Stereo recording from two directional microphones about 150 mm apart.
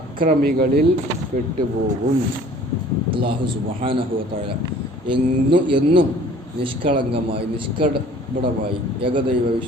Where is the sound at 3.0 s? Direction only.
35° right (ahead or behind).